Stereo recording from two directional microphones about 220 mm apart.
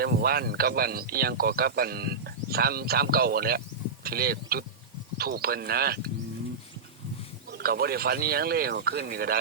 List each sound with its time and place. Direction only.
0.0 s speech: 45° right (ahead or behind)
7.6 s speech: 45° right (ahead or behind)